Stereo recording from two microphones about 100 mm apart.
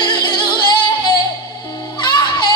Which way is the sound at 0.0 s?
45° left (ahead or behind).